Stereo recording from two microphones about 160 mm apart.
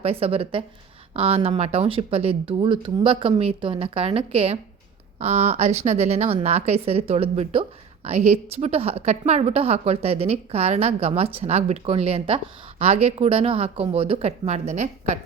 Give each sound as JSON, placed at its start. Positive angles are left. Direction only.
{"t": 0.0, "sound": "a woman's voice", "side_deg": -40}